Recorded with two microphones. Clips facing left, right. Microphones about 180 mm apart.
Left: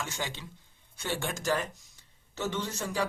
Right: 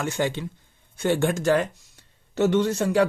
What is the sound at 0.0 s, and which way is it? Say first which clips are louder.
A man's voice: right 11 dB; 55° right (ahead or behind).